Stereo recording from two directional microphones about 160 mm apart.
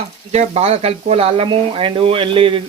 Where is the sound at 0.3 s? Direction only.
40° right (ahead or behind).